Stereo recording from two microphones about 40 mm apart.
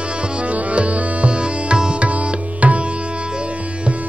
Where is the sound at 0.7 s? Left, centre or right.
Right.